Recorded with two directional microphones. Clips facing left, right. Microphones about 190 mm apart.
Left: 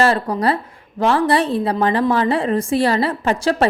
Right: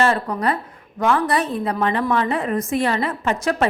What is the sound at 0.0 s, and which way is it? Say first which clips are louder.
A woman's voice: left 3 dB; 35° left (ahead or behind).